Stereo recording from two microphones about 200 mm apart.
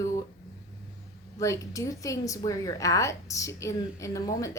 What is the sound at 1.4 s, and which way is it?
A woman's voice, 15° left (ahead or behind).